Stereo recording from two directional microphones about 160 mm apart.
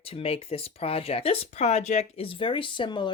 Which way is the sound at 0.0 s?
40° left (ahead or behind).